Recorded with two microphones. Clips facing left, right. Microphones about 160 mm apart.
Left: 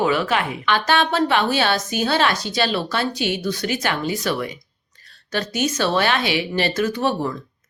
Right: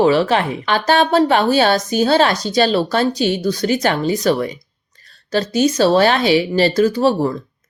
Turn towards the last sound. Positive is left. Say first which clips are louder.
# right 6 dB
turn(degrees=-35)  # may be behind; listen again after turning